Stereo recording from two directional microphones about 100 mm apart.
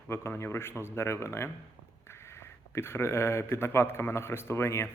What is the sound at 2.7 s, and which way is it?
A man's voice, 25° left (ahead or behind).